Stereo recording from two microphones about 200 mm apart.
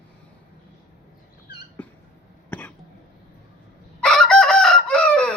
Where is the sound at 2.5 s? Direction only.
10° left (ahead or behind).